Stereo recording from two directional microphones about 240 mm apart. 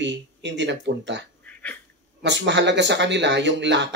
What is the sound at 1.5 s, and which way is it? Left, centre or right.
Dog, centre.